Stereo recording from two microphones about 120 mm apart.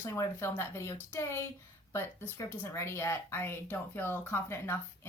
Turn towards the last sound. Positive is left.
turn(degrees=20)  # may be behind; listen again after turning